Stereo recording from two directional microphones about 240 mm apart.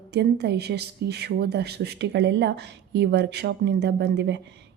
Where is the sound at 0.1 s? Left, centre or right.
Right.